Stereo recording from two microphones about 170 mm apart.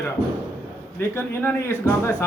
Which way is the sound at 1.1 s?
15° left (ahead or behind).